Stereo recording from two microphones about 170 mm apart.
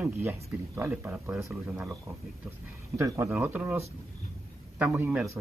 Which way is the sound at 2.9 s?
20° right (ahead or behind).